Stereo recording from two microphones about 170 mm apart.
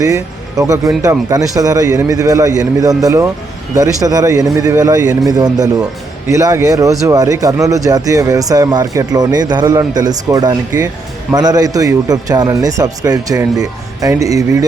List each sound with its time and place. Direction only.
0.0 s speech: 20° right (ahead or behind)